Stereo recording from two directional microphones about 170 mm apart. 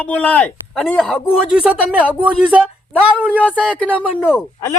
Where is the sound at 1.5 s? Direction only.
10° right (ahead or behind).